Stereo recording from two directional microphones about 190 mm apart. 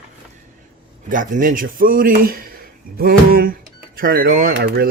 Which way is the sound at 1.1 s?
45° right (ahead or behind).